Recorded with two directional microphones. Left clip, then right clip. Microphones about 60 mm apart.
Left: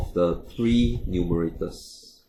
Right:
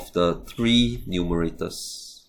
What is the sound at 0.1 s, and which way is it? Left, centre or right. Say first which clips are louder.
Speech: right 1 dB; right.